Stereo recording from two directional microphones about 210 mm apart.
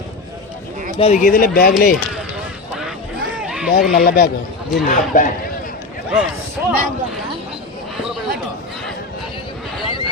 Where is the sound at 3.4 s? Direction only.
5° right (ahead or behind).